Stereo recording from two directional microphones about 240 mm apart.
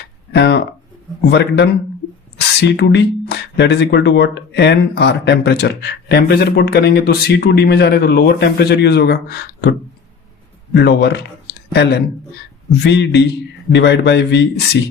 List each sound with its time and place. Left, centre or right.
0.3 s speech: left
10.8 s speech: left